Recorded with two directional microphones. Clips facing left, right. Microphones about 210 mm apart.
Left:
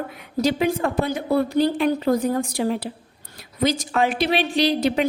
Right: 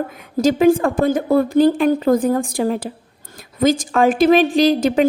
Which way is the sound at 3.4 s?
50° right (ahead or behind).